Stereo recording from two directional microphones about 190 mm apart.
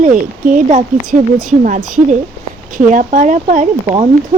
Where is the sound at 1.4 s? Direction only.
45° right (ahead or behind).